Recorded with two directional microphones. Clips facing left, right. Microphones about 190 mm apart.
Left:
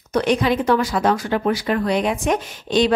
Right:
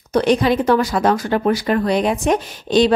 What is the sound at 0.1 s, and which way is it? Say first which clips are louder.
A woman's voice: right 3 dB; 35° right (ahead or behind).